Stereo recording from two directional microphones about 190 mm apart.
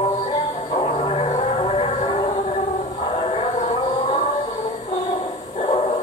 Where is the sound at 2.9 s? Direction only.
35° left (ahead or behind).